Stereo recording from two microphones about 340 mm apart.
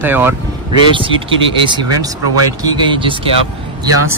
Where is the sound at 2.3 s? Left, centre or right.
Left.